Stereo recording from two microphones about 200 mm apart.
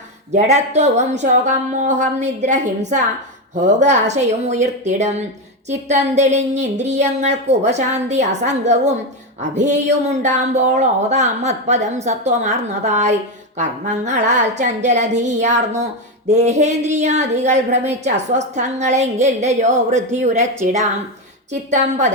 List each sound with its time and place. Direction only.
0.3 s a woman's voice: 35° right (ahead or behind)
21.5 s a woman's voice: 35° right (ahead or behind)